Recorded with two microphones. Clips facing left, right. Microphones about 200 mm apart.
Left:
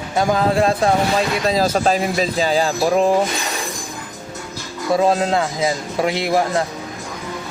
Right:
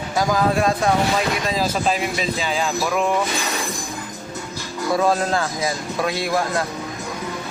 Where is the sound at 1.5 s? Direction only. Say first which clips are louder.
Left 4 dB; 40° left (ahead or behind).